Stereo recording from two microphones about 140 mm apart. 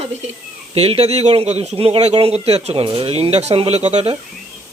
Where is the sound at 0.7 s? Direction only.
45° right (ahead or behind).